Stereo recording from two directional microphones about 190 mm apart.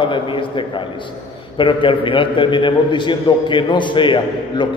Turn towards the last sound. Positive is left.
turn(degrees=25)  # may be behind; listen again after turning